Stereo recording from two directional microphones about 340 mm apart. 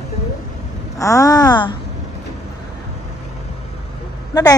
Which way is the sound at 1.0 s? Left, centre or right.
Centre.